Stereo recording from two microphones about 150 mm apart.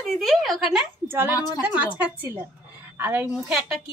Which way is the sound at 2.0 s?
15° right (ahead or behind).